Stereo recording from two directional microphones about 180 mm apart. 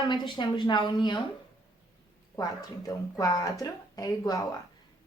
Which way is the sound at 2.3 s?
20° left (ahead or behind).